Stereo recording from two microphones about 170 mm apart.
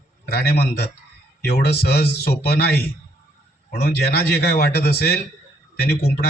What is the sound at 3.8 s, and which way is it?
A man's voice, 70° left (ahead or behind).